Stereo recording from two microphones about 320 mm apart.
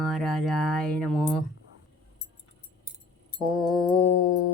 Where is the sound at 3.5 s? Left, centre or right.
Centre.